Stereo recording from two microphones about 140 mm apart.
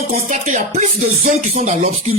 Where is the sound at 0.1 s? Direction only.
60° right (ahead or behind).